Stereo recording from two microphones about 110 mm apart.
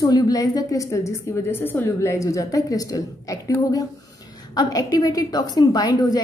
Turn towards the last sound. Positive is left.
turn(degrees=35)  # may be behind; listen again after turning